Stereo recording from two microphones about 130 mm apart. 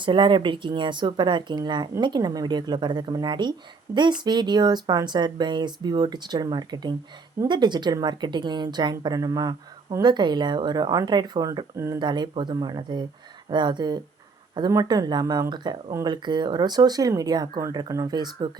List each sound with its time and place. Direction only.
0.0 s speech: 40° right (ahead or behind)